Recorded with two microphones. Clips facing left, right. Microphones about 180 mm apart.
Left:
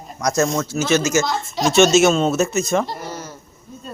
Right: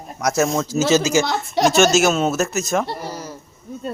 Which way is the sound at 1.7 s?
Centre (ahead or behind).